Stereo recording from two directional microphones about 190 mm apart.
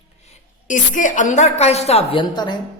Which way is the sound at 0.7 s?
40° left (ahead or behind).